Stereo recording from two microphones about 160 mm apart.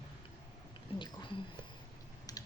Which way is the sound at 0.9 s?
30° left (ahead or behind).